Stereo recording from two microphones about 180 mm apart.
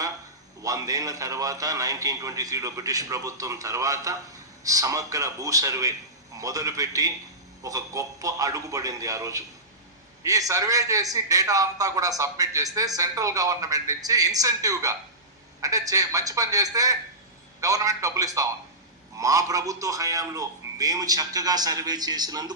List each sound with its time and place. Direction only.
0.6 s a man's voice: 20° right (ahead or behind)